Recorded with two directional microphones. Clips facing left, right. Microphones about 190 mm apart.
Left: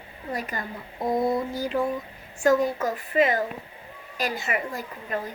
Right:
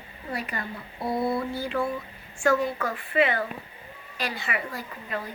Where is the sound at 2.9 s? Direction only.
40° left (ahead or behind).